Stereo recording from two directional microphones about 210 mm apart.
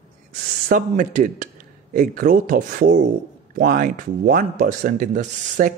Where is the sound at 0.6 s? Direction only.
40° right (ahead or behind).